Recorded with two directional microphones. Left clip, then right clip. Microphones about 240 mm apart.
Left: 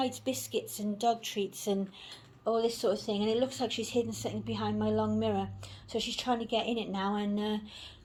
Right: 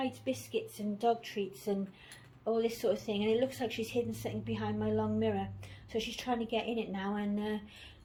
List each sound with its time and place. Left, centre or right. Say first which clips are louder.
0.0 s speech: left 3 dB; left
2.4 s speech: left 3 dB; left